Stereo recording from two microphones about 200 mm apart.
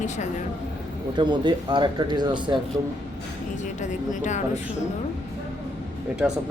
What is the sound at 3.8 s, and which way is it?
Speech, 40° left (ahead or behind).